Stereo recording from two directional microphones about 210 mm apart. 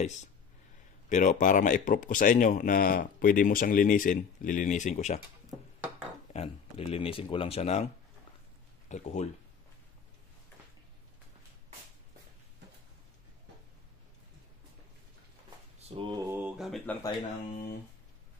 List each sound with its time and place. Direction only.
1.0 s speech: 35° left (ahead or behind)
6.3 s speech: 30° left (ahead or behind)
15.8 s speech: 25° right (ahead or behind); by 16.9 s centre (ahead or behind)